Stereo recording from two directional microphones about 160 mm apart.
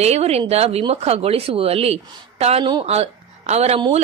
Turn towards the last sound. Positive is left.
turn(degrees=-40)  # may be behind; listen again after turning